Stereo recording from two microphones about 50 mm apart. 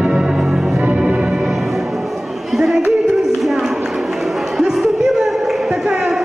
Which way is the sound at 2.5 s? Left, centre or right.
Centre.